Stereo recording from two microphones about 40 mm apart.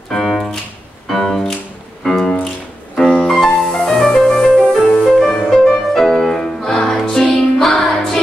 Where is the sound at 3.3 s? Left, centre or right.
Centre.